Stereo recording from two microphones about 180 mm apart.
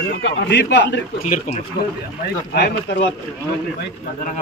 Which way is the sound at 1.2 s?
40° left (ahead or behind).